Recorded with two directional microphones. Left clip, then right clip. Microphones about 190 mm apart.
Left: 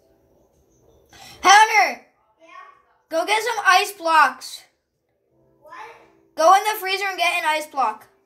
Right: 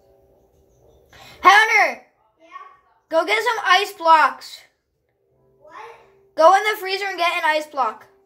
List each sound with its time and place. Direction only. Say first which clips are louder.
1.1 s babbling: even; 15° right (ahead or behind)
3.1 s a woman's voice: right 2 dB; 20° right (ahead or behind)
6.3 s a woman's voice: right 1 dB; 20° right (ahead or behind)